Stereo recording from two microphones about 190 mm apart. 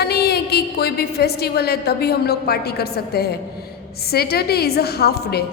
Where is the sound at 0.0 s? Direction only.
55° left (ahead or behind).